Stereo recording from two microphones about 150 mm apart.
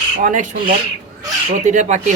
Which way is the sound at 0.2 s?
60° right (ahead or behind).